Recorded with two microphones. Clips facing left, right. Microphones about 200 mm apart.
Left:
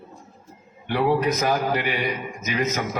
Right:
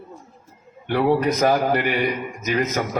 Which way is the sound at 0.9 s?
50° right (ahead or behind).